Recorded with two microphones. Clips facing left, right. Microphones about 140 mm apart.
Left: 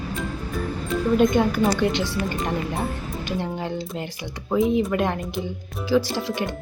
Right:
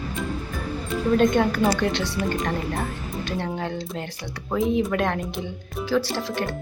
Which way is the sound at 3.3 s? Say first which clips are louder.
Left 1 dB; 10° left (ahead or behind).